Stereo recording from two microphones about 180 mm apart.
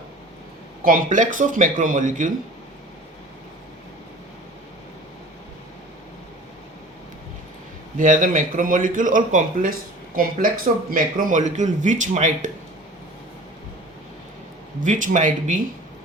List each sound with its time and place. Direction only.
0.9 s speech: 50° right (ahead or behind)
7.9 s speech: 45° right (ahead or behind)
14.8 s speech: 45° right (ahead or behind)